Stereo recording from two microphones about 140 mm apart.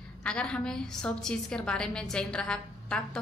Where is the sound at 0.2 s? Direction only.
5° left (ahead or behind).